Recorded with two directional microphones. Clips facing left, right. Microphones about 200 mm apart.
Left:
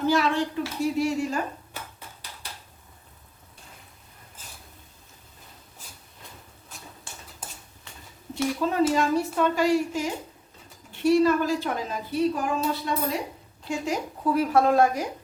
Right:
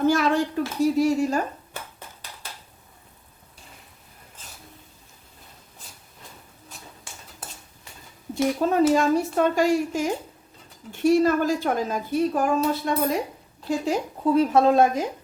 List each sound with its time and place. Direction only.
0.1 s speech: 45° right (ahead or behind)
8.7 s a woman's voice: 45° right (ahead or behind)
13.7 s a woman's voice: 30° right (ahead or behind)